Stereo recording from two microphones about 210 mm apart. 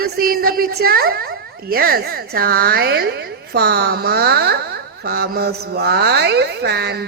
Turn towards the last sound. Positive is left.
turn(degrees=-50)  # may be behind; listen again after turning